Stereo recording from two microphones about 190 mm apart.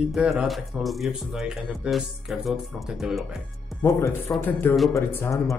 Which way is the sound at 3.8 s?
10° left (ahead or behind).